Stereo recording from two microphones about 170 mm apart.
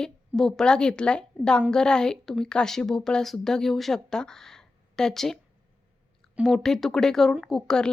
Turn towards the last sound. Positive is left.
turn(degrees=5)  # may be behind; listen again after turning